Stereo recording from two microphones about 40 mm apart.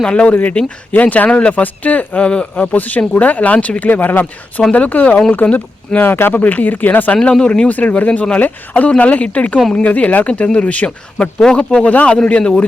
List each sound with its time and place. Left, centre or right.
0.0 s speech: left
2.7 s speech: left
3.8 s speech: left
4.7 s speech: left
6.0 s speech: left
6.3 s speech: left
7.2 s speech: left
7.7 s speech: left
8.4 s speech: left